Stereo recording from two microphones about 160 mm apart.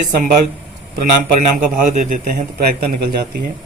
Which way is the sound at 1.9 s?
50° right (ahead or behind).